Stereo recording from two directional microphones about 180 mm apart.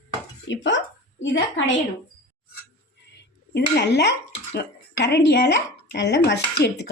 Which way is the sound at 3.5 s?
70° left (ahead or behind).